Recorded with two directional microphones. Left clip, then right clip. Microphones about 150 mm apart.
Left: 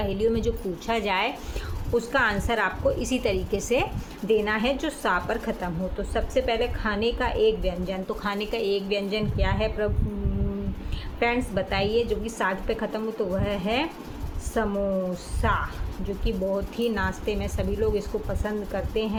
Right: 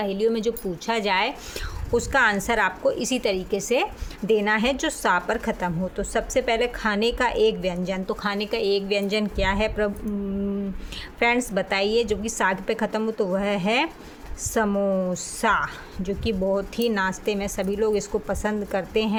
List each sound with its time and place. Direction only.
0.0 s a woman's voice: 35° right (ahead or behind)
11.2 s a woman's voice: 45° right (ahead or behind)